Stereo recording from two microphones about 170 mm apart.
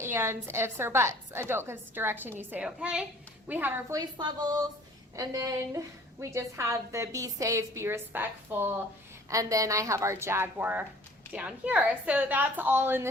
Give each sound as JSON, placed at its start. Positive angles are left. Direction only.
{"t": 0.0, "sound": "a woman's voice", "side_deg": -15}
{"t": 4.2, "sound": "a woman's voice", "side_deg": -25}